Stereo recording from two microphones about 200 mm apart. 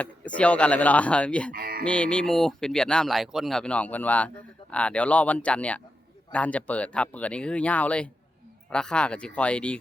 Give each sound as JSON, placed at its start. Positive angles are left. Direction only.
{"t": 0.0, "sound": "speech", "side_deg": 5}
{"t": 1.5, "sound": "a sound", "side_deg": -45}
{"t": 1.8, "sound": "speech", "side_deg": 5}